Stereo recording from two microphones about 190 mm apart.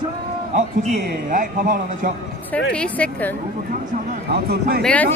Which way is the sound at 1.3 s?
45° right (ahead or behind).